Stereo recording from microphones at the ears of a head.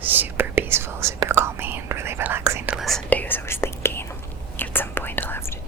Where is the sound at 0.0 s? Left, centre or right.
Right.